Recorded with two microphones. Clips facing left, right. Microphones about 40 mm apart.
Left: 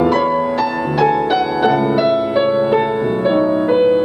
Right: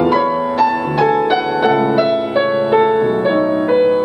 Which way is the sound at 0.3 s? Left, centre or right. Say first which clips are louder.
Right 2 dB; centre.